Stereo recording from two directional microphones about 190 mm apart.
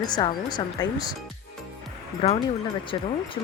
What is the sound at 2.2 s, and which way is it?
Speech, 25° left (ahead or behind).